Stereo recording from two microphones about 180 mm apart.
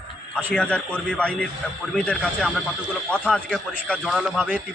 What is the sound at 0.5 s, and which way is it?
A man's voice, 5° left (ahead or behind).